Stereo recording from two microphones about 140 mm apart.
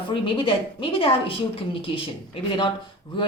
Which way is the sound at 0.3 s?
40° left (ahead or behind).